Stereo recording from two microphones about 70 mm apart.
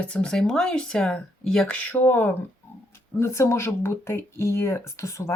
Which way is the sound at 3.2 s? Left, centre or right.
Left.